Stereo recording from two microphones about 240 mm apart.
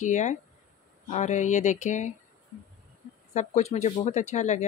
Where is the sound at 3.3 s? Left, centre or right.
Left.